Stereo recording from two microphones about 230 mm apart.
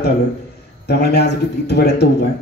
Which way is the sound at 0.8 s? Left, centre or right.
Left.